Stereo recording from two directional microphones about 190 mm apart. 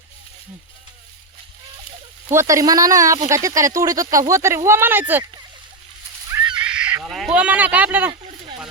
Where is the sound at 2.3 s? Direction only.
15° right (ahead or behind).